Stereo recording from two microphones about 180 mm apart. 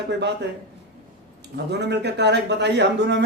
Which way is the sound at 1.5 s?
70° right (ahead or behind).